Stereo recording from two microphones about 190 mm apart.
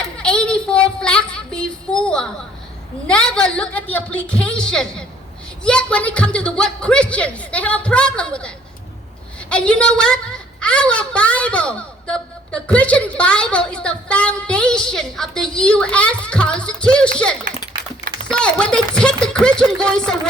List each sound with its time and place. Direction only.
0.2 s child singing: 5° left (ahead or behind)
3.1 s a woman's voice: 5° left (ahead or behind)
17.5 s speech: 45° right (ahead or behind)
18.3 s speech: 5° left (ahead or behind)